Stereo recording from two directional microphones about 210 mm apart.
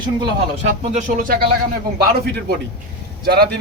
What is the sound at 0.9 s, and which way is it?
Speech, 40° right (ahead or behind).